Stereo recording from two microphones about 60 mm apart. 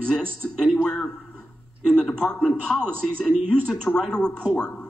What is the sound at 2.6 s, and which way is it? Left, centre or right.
A man's voice, centre.